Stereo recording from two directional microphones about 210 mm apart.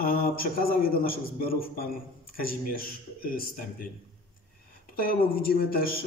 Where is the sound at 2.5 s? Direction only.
45° left (ahead or behind).